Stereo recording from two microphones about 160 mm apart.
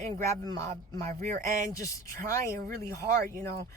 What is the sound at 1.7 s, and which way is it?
Speech, 20° left (ahead or behind).